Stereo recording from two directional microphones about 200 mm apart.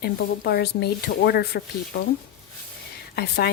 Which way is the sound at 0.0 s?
55° left (ahead or behind).